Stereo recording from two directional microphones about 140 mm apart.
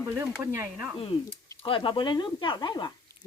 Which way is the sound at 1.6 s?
35° left (ahead or behind).